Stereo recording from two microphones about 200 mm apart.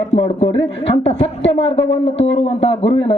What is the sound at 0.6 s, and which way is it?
A woman's voice, 30° left (ahead or behind).